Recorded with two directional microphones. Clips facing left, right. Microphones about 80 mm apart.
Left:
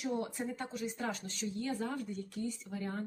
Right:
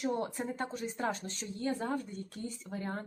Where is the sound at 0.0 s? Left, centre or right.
Right.